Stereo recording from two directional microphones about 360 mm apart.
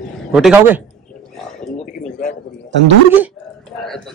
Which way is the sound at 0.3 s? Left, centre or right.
Centre.